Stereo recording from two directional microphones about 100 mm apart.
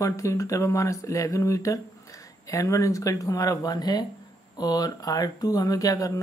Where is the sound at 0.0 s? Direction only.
30° left (ahead or behind).